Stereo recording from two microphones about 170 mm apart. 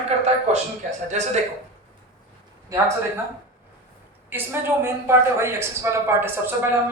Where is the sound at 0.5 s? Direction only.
40° right (ahead or behind).